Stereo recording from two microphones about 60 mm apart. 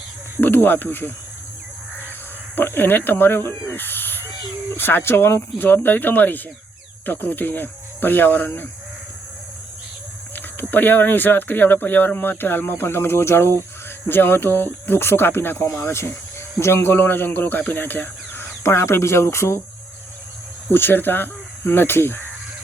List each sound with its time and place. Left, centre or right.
0.4 s speech: left
2.6 s speech: left
10.3 s speech: left
20.7 s speech: left